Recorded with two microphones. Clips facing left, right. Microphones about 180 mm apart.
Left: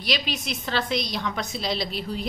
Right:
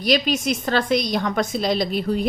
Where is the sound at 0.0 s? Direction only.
45° right (ahead or behind).